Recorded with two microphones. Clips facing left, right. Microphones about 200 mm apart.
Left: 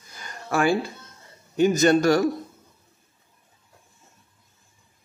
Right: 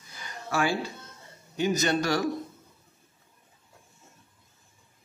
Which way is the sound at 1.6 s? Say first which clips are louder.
Left 8 dB; 50° left (ahead or behind).